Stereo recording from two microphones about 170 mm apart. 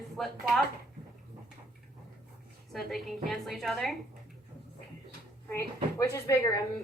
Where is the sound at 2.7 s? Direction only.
Centre (ahead or behind).